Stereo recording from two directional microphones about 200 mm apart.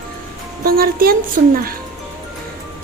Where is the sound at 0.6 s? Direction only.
45° right (ahead or behind).